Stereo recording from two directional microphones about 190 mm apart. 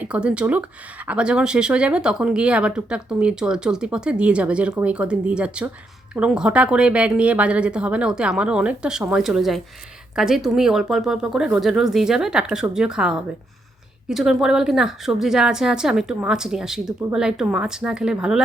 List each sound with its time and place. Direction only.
0.0 s speech: 5° right (ahead or behind)